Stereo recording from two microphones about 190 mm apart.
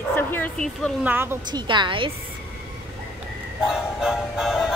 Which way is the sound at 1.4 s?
25° right (ahead or behind).